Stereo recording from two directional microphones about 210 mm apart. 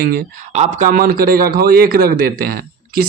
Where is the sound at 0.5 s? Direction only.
35° right (ahead or behind).